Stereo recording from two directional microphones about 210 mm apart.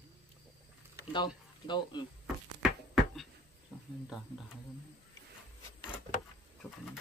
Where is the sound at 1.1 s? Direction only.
20° left (ahead or behind).